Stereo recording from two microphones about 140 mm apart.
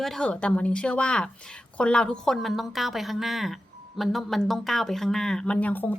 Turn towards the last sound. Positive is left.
turn(degrees=10)  # may be behind; listen again after turning